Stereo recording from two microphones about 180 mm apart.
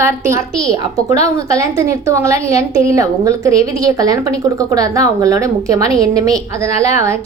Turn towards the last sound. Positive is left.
turn(degrees=-20)  # may be behind; listen again after turning